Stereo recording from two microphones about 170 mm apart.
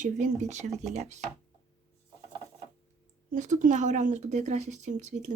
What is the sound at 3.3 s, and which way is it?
Speech, 45° right (ahead or behind).